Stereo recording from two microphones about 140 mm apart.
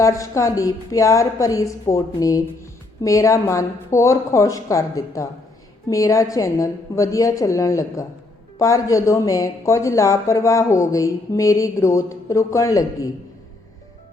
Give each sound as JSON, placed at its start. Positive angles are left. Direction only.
{"t": 0.0, "sound": "speech", "side_deg": 20}